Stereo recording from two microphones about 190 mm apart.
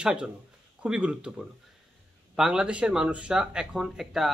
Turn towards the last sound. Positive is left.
turn(degrees=0)  # may be behind; listen again after turning